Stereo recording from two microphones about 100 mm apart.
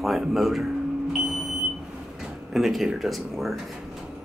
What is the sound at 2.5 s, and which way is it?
Speech, 5° right (ahead or behind).